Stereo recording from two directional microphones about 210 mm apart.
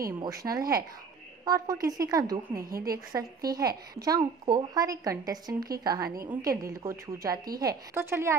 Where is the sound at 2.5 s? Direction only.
45° right (ahead or behind).